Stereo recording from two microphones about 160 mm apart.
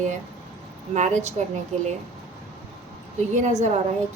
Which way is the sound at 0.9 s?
45° right (ahead or behind).